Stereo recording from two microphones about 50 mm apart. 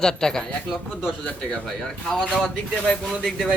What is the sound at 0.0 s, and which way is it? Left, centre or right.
Speech, centre.